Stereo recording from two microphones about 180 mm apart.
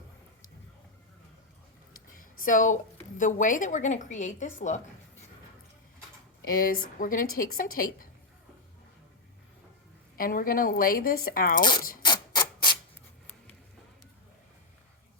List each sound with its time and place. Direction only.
2.4 s speech: 45° left (ahead or behind)
6.4 s speech: 55° left (ahead or behind)
10.2 s speech: 50° left (ahead or behind)
12.0 s mechanisms: 25° left (ahead or behind)